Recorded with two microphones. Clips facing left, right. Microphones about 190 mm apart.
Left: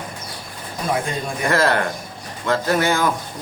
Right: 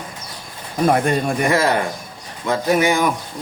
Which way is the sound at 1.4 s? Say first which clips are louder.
Left 2 dB; 15° right (ahead or behind).